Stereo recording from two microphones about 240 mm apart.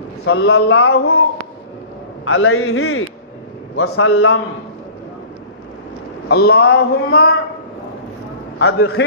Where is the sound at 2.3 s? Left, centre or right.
Left.